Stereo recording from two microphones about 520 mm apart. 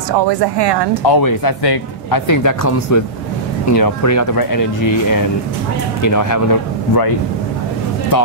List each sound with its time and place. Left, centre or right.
1.0 s speech: left